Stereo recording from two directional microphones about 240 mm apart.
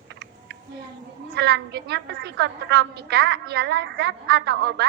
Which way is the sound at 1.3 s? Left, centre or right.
Right.